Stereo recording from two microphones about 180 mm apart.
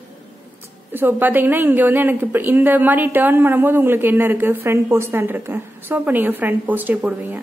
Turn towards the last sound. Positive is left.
turn(degrees=-10)  # may be behind; listen again after turning